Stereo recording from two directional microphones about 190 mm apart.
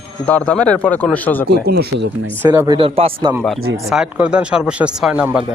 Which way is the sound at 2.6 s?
30° right (ahead or behind).